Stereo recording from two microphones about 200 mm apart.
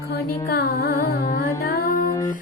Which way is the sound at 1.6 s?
50° left (ahead or behind).